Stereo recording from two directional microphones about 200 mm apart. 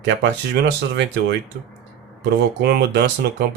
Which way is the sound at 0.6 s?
55° right (ahead or behind).